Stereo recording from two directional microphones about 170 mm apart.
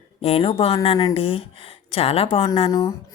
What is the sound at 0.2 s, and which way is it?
Speech, 35° left (ahead or behind).